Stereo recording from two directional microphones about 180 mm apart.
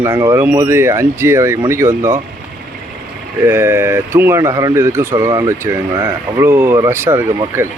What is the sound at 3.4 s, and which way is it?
Speech, 10° right (ahead or behind).